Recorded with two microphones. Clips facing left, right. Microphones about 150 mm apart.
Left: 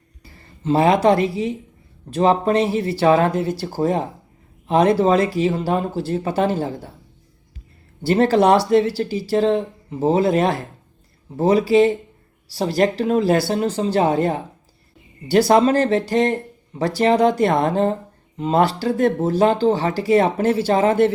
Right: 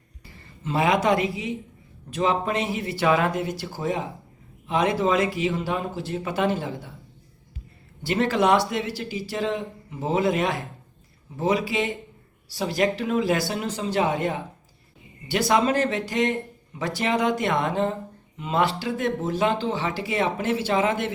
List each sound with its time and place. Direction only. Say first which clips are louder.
0.6 s speech: left 7 dB; 30° left (ahead or behind)
8.0 s speech: left 7 dB; 35° left (ahead or behind)